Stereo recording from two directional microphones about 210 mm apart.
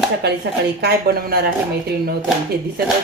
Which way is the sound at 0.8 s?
50° right (ahead or behind).